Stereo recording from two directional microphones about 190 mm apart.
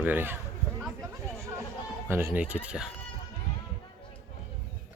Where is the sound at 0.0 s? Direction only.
10° right (ahead or behind).